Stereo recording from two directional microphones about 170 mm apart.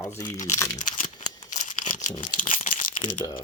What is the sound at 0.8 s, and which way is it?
Speech, 50° left (ahead or behind).